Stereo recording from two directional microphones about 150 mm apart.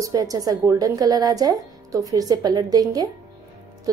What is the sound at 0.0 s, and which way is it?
A woman's voice, 25° right (ahead or behind).